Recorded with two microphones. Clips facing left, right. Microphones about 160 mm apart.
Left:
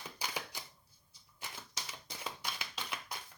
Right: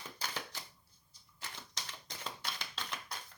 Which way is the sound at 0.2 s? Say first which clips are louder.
Left 1 dB; 10° left (ahead or behind).